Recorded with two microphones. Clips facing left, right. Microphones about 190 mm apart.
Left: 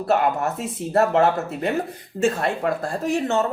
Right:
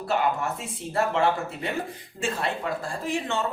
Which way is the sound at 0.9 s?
45° left (ahead or behind).